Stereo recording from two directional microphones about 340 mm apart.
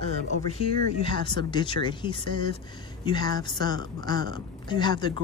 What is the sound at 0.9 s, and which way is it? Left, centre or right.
Speech, centre.